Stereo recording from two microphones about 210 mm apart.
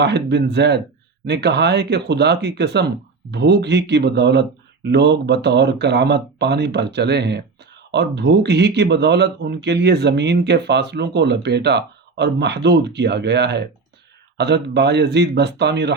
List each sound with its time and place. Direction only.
0.0 s speech: 55° right (ahead or behind)